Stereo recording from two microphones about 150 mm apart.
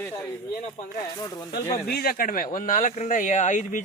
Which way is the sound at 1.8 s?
90° left.